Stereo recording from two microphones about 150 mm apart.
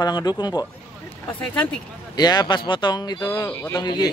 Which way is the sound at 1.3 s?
5° left (ahead or behind).